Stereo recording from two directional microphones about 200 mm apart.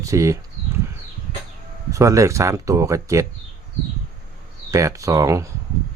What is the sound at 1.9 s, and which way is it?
Speech, 15° right (ahead or behind).